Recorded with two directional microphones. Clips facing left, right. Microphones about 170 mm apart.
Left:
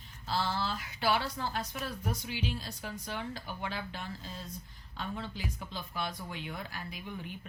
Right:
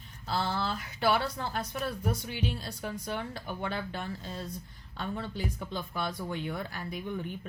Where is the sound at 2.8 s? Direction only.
55° right (ahead or behind).